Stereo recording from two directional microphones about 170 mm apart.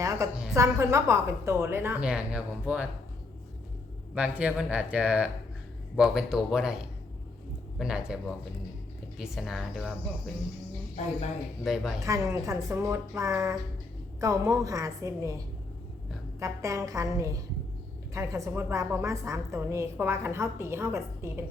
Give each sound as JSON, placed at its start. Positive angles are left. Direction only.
{"t": 0.0, "sound": "a woman's voice", "side_deg": -20}
{"t": 4.1, "sound": "a woman's voice", "side_deg": -5}
{"t": 7.8, "sound": "speech", "side_deg": -5}
{"t": 11.6, "sound": "speech", "side_deg": 0}
{"t": 12.0, "sound": "a woman's voice", "side_deg": -20}
{"t": 16.4, "sound": "a woman's voice", "side_deg": -20}